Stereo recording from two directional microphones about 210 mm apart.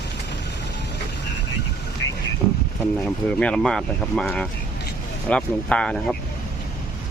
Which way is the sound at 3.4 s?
5° left (ahead or behind).